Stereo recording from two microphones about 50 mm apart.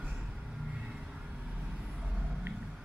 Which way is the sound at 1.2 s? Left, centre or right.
Right.